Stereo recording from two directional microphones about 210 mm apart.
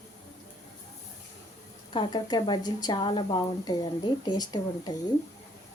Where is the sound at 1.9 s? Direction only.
20° left (ahead or behind).